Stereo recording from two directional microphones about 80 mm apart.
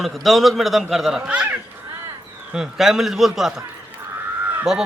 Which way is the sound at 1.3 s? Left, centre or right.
Centre.